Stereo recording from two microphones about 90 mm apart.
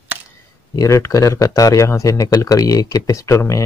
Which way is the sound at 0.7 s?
35° left (ahead or behind).